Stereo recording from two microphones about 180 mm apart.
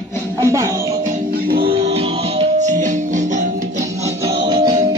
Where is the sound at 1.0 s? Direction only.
50° right (ahead or behind).